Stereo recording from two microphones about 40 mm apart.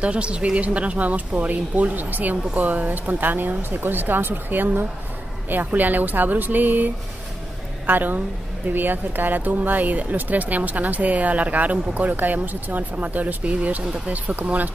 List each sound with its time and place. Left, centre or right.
0.0 s a woman's voice: right